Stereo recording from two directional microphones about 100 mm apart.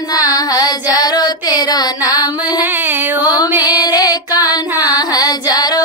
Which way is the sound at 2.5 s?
20° right (ahead or behind).